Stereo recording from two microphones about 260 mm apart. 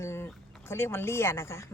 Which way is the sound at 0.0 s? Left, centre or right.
Centre.